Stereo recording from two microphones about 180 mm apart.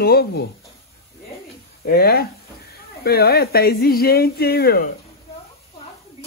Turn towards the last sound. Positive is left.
turn(degrees=60)  # may be behind; listen again after turning